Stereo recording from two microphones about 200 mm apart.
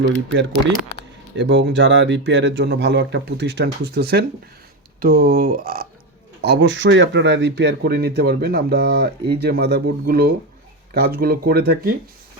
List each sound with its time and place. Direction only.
0.3 s speech: 65° right (ahead or behind); by 5.9 s 50° right (ahead or behind)
6.4 s speech: 60° right (ahead or behind)